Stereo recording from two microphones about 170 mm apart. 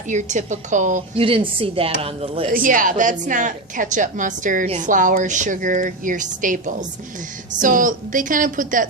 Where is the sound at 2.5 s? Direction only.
55° right (ahead or behind).